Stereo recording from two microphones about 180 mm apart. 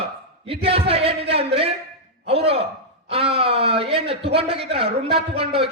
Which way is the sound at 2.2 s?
30° right (ahead or behind).